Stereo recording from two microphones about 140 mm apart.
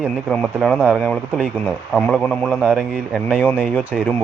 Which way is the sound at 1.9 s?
5° left (ahead or behind).